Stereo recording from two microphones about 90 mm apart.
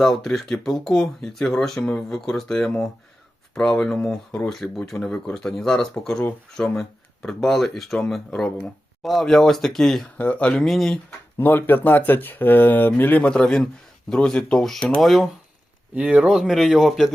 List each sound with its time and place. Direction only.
0.0 s speech: 5° left (ahead or behind)
10.2 s speech: 15° left (ahead or behind)
10.6 s speech: centre (ahead or behind)
11.3 s speech: 20° left (ahead or behind); by 17.1 s 5° right (ahead or behind)